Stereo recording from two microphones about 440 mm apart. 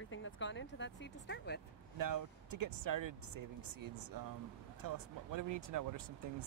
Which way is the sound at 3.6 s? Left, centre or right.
Right.